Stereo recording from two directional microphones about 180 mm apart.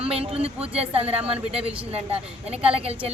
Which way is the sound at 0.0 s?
35° right (ahead or behind).